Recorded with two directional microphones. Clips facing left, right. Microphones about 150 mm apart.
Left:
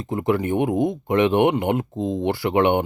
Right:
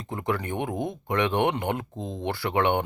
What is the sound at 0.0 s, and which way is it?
Speech, 20° left (ahead or behind).